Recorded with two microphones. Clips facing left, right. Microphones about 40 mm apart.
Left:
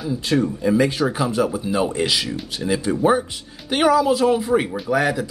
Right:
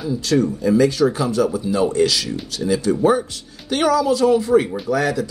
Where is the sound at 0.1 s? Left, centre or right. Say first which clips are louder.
Right 2 dB; left.